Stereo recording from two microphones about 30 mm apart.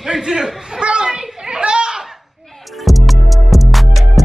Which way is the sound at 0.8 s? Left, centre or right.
Right.